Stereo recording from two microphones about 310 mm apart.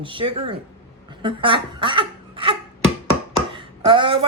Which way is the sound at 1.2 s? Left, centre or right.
Centre.